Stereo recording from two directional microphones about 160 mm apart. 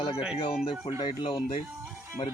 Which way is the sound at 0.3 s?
30° left (ahead or behind).